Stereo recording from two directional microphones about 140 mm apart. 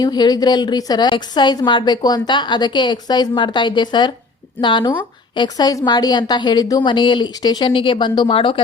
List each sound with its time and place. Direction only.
0.0 s a woman's voice: 30° left (ahead or behind)